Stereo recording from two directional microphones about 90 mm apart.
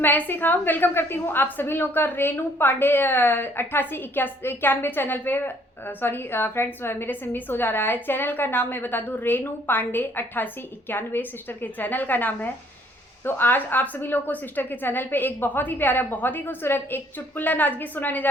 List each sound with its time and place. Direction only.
0.0 s a woman's voice: 20° left (ahead or behind)